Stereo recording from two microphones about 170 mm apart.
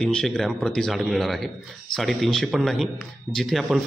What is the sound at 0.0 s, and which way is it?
A man's voice, 5° left (ahead or behind).